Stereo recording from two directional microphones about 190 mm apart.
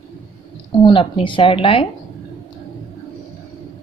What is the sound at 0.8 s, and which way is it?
A woman's voice, 25° left (ahead or behind).